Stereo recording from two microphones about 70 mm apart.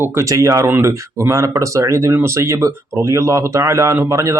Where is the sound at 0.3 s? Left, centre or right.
Right.